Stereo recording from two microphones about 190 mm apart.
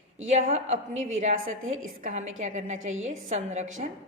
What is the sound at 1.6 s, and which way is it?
Speech, 90° right.